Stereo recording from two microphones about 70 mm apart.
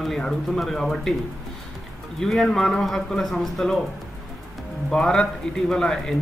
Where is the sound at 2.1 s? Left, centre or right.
Centre.